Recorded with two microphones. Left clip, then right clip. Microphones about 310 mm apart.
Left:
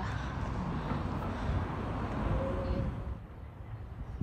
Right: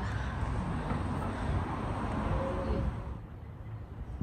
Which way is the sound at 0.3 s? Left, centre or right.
Right.